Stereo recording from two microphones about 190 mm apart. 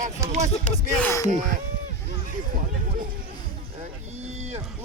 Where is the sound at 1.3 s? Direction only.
45° right (ahead or behind).